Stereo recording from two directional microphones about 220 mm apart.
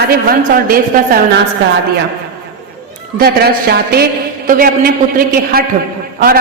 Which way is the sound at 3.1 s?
45° right (ahead or behind).